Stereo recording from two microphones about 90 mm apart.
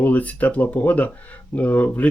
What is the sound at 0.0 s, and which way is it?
Speech, 15° left (ahead or behind).